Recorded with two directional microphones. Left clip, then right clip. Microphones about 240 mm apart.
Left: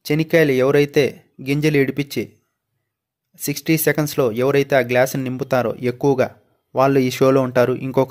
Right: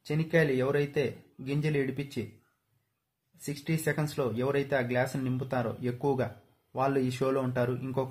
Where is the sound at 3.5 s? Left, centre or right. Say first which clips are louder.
Left 14 dB; left.